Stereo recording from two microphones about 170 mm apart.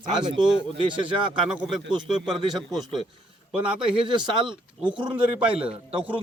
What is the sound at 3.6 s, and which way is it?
Speech, 30° right (ahead or behind).